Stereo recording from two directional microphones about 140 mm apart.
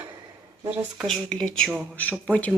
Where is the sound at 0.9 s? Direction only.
5° left (ahead or behind).